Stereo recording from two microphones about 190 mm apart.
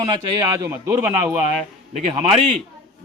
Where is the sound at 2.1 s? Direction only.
30° right (ahead or behind).